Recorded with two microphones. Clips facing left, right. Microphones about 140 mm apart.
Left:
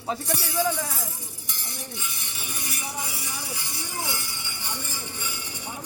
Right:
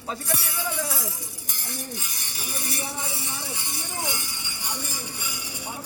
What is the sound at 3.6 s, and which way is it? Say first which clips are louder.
Music: right 1 dB; 20° right (ahead or behind).